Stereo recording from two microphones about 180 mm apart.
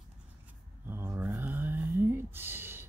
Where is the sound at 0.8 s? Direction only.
15° right (ahead or behind).